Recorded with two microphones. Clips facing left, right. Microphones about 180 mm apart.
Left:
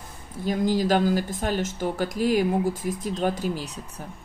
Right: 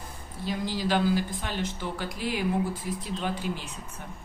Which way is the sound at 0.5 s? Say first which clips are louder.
Left 6 dB; 45° left (ahead or behind).